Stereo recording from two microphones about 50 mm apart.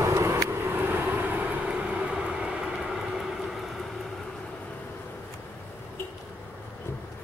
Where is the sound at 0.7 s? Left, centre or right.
Right.